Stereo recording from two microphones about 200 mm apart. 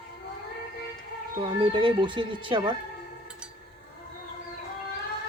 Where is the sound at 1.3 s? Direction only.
25° right (ahead or behind).